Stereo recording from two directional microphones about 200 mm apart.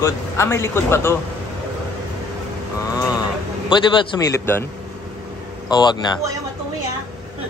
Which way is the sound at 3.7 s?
20° left (ahead or behind).